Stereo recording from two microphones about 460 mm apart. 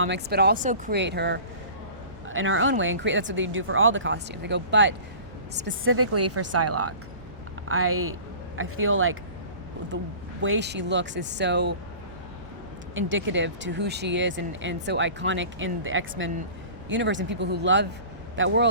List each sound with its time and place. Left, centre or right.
0.0 s speech: right
10.4 s speech: right
12.9 s speech: right